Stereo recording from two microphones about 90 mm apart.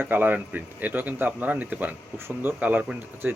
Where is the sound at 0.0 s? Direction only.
20° right (ahead or behind).